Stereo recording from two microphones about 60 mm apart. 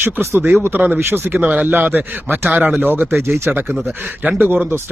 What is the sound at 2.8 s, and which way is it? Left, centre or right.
Speech, right.